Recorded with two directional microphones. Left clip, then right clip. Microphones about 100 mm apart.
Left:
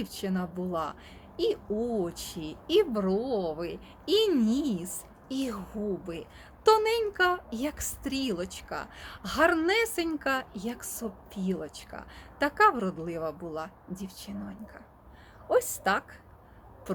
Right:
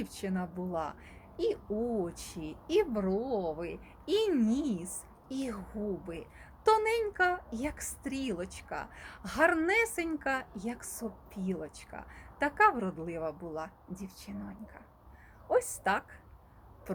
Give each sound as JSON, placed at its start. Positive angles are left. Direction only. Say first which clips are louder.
{"t": 0.0, "sound": "speech", "louder": "left 3 dB", "side_deg": 15}
{"t": 6.7, "sound": "a woman's voice", "louder": "left 4 dB", "side_deg": 20}